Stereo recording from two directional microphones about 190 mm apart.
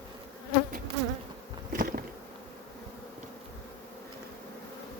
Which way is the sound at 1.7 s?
45° right (ahead or behind).